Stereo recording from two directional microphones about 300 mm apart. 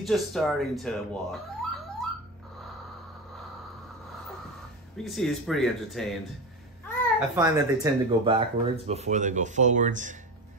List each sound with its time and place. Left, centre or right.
0.0 s speech: centre
4.9 s speech: centre
7.2 s speech: centre